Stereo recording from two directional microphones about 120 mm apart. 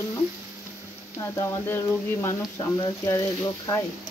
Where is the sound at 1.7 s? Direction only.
25° left (ahead or behind).